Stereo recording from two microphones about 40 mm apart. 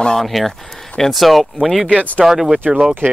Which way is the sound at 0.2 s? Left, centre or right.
Centre.